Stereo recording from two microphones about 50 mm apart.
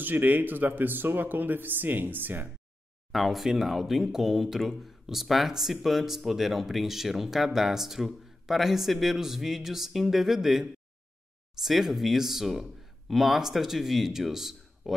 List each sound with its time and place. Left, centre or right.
0.0 s speech: right
3.1 s speech: centre